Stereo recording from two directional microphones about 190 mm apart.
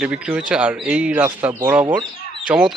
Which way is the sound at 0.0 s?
5° right (ahead or behind).